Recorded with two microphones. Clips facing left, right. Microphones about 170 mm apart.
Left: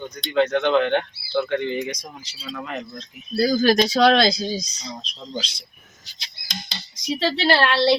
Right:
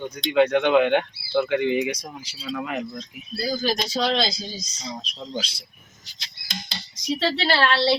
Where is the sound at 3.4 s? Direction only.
75° left (ahead or behind).